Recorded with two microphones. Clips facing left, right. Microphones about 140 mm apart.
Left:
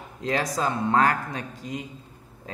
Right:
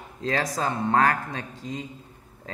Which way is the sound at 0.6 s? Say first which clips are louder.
Even; 20° left (ahead or behind).